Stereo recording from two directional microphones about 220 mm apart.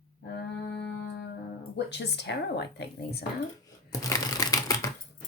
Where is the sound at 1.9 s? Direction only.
50° left (ahead or behind).